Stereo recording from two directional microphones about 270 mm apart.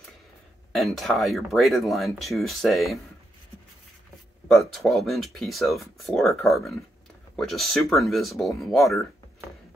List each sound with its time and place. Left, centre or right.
0.7 s speech: centre
4.5 s speech: centre